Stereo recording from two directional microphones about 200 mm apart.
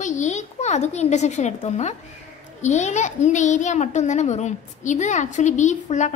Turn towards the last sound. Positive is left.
turn(degrees=35)  # may be behind; listen again after turning